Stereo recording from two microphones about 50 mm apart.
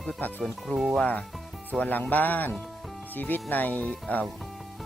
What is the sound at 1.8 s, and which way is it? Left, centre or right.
Speech, left.